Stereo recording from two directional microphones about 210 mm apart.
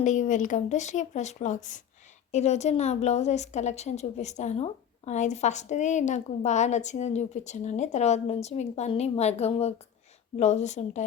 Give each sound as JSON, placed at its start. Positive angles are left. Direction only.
{"t": 0.0, "sound": "a woman's voice", "side_deg": 35}